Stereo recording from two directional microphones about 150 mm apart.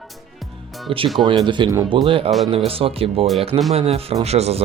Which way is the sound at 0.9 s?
35° right (ahead or behind).